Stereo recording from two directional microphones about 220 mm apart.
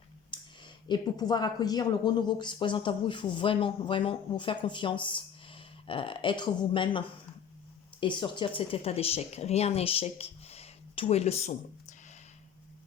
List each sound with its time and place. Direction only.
0.3 s a sound: 20° left (ahead or behind)
0.9 s speech: 20° left (ahead or behind)
8.0 s speech: 20° left (ahead or behind)